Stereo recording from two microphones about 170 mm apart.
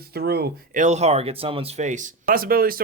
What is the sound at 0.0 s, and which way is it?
Speech, 65° right (ahead or behind).